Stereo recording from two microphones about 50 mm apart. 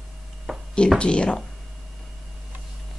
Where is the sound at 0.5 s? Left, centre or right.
Centre.